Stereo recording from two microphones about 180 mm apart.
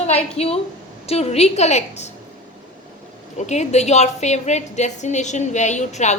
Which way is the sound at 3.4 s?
40° left (ahead or behind).